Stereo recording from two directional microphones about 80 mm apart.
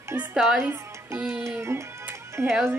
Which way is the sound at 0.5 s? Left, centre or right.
Right.